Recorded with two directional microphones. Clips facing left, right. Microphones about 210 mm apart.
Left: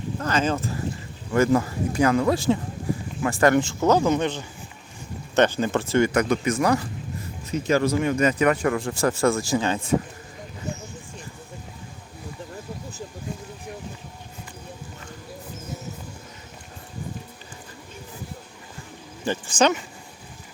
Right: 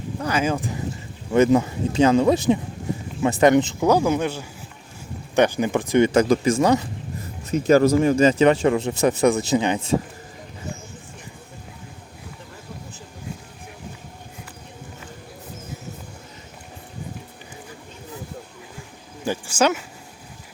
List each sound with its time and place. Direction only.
0.2 s speech: 10° right (ahead or behind)
6.1 s speech: 30° right (ahead or behind)
7.7 s speech: 35° right (ahead or behind); by 9.8 s 15° right (ahead or behind)
19.2 s a sound: 10° right (ahead or behind)